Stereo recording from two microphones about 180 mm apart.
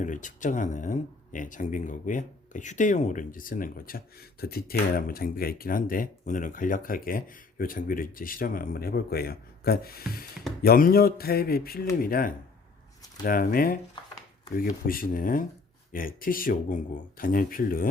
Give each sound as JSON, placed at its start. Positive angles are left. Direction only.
{"t": 0.0, "sound": "speech", "side_deg": 45}